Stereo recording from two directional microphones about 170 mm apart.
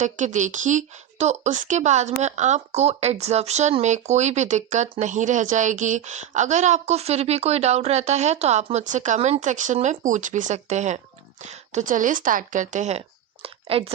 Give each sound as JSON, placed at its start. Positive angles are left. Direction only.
{"t": 0.0, "sound": "speech", "side_deg": -45}